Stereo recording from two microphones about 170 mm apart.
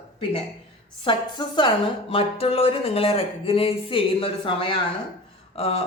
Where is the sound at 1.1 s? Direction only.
30° left (ahead or behind).